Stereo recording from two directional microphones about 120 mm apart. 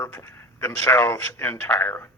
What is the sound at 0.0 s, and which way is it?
A man's voice, 20° left (ahead or behind).